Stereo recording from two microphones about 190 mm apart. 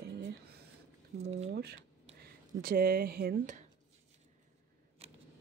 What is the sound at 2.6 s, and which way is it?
Speech, 50° right (ahead or behind).